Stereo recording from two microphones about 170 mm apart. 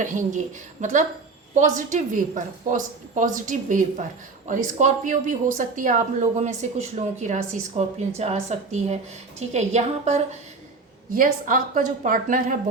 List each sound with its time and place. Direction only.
0.0 s a woman's voice: 45° right (ahead or behind)
11.1 s a woman's voice: 50° right (ahead or behind)